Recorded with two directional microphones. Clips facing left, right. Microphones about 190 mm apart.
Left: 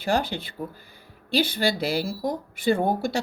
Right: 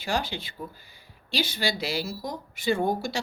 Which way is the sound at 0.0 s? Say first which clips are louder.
Left 5 dB; 55° left (ahead or behind).